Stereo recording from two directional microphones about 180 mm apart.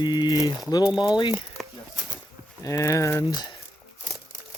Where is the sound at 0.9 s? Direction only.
5° right (ahead or behind).